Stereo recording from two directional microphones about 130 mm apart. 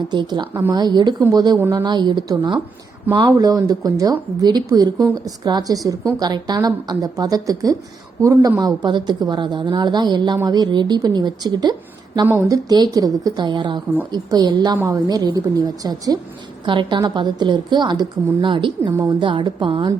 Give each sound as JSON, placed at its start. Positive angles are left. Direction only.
{"t": 0.1, "sound": "a woman's voice", "side_deg": -35}